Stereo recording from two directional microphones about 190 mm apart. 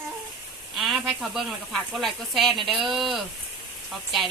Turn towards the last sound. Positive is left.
turn(degrees=0)  # may be behind; listen again after turning